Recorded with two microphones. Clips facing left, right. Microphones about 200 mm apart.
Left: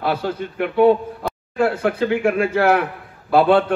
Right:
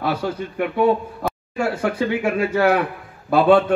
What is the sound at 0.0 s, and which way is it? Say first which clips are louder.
A man's voice: left 1 dB; 55° left (ahead or behind).